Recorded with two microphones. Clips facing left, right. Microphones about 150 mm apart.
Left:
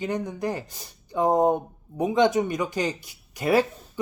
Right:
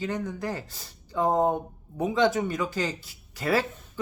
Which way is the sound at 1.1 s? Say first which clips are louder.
Left 3 dB; 20° left (ahead or behind).